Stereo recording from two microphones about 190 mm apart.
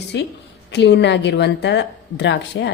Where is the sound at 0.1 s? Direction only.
65° left (ahead or behind).